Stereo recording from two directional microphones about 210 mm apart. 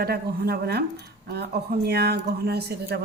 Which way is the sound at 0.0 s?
50° right (ahead or behind).